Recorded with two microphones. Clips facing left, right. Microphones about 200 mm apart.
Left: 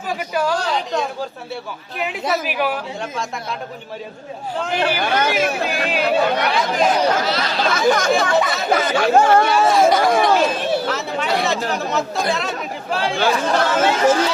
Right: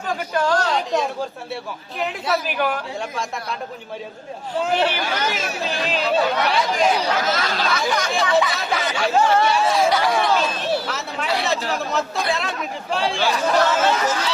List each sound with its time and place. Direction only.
0.1 s a woman's voice: 10° left (ahead or behind)
2.0 s speech: 5° left (ahead or behind)
4.9 s speech: 55° left (ahead or behind)
6.7 s speech: 45° left (ahead or behind)
7.3 s speech: 45° right (ahead or behind)
7.6 s speech: 45° left (ahead or behind)
10.8 s speech: centre (ahead or behind)
13.1 s speech: 55° left (ahead or behind)